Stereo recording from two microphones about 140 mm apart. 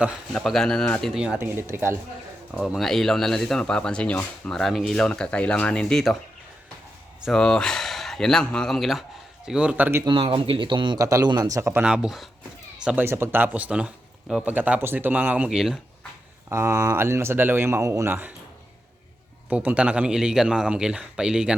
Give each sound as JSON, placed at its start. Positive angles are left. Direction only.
{"t": 0.3, "sound": "speech", "side_deg": 0}
{"t": 1.1, "sound": "speech", "side_deg": -5}
{"t": 1.4, "sound": "speech", "side_deg": -15}
{"t": 2.5, "sound": "speech", "side_deg": -5}
{"t": 7.3, "sound": "speech", "side_deg": 5}
{"t": 10.1, "sound": "speech", "side_deg": -35}
{"t": 11.8, "sound": "speech", "side_deg": -5}
{"t": 13.1, "sound": "speech", "side_deg": -15}
{"t": 16.5, "sound": "speech", "side_deg": -20}
{"t": 19.5, "sound": "speech", "side_deg": -10}